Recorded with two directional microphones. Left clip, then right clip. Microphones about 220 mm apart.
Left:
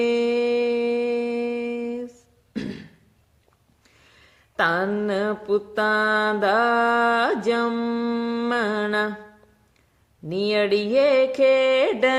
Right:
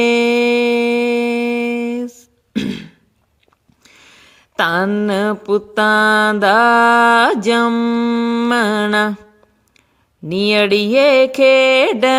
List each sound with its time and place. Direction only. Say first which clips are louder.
0.0 s music: right 8 dB; 40° right (ahead or behind)
3.8 s a sound: right 10 dB; 45° right (ahead or behind)
7.4 s music: right 8 dB; 40° right (ahead or behind)
10.2 s music: right 7 dB; 40° right (ahead or behind)